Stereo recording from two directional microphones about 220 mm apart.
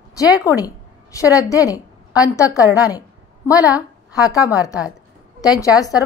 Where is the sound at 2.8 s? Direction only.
15° left (ahead or behind).